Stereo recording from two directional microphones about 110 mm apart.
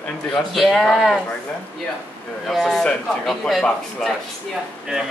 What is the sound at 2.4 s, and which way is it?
Speech, centre (ahead or behind).